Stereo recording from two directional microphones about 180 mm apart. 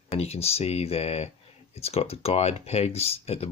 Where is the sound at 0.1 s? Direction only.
35° left (ahead or behind).